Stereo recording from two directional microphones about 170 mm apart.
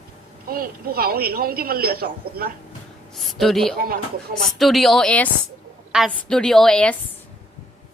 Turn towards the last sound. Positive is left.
turn(degrees=5)  # may be behind; listen again after turning